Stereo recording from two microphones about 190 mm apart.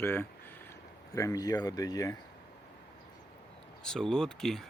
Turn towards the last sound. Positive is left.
turn(degrees=0)  # may be behind; listen again after turning